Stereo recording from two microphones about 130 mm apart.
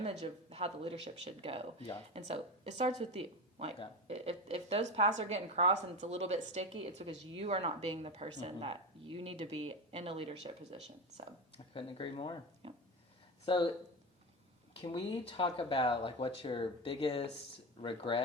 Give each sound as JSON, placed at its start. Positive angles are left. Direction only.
{"t": 0.0, "sound": "a woman's voice", "side_deg": -55}
{"t": 11.5, "sound": "speech", "side_deg": 40}
{"t": 12.6, "sound": "a sound", "side_deg": -45}
{"t": 13.4, "sound": "speech", "side_deg": 40}
{"t": 14.9, "sound": "speech", "side_deg": 40}